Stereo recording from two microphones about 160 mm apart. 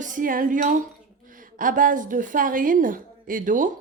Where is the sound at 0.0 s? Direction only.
55° right (ahead or behind).